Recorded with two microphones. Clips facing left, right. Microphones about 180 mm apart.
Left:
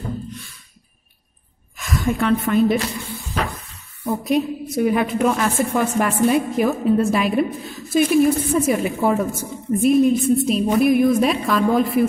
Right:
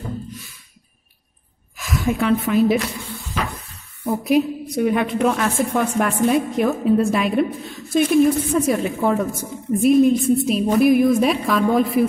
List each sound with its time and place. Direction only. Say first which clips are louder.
1.8 s a woman's voice: even; centre (ahead or behind)
4.0 s a woman's voice: right 2 dB; centre (ahead or behind)